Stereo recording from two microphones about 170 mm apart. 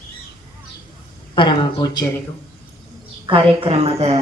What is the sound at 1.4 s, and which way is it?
Speech, 25° left (ahead or behind).